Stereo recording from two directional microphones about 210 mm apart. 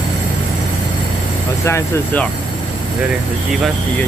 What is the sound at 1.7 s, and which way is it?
Speech, 15° left (ahead or behind).